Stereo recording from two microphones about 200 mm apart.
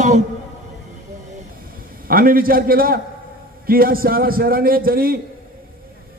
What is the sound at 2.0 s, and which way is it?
A man's voice, 45° right (ahead or behind).